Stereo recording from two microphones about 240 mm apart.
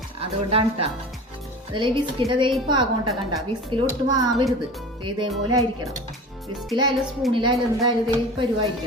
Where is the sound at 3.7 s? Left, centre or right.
Centre.